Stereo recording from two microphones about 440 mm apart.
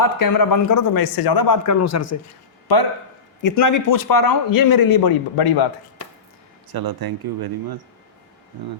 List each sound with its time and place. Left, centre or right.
0.0 s a man's voice: left
2.7 s a man's voice: left
3.4 s a man's voice: left
6.7 s speech: right